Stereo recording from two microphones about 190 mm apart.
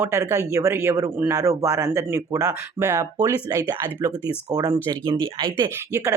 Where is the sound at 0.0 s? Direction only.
15° right (ahead or behind).